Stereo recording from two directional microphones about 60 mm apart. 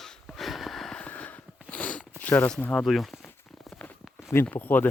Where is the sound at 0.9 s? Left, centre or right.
Left.